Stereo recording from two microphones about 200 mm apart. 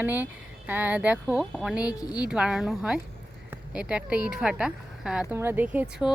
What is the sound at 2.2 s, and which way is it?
Speech, 5° right (ahead or behind).